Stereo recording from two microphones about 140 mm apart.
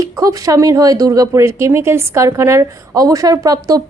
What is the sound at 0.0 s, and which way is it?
Speech, 25° right (ahead or behind).